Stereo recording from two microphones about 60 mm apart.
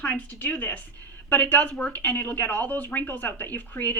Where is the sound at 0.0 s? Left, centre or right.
Left.